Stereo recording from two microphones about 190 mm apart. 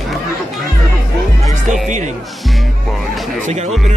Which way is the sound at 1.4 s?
40° right (ahead or behind).